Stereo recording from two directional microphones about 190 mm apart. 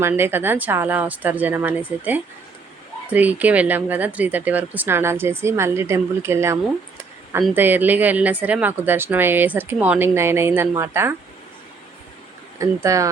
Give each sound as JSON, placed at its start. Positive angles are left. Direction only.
{"t": 0.0, "sound": "speech", "side_deg": -10}
{"t": 12.5, "sound": "speech", "side_deg": -15}